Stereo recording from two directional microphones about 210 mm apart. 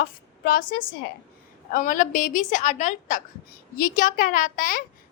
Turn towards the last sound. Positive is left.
turn(degrees=40)  # may be behind; listen again after turning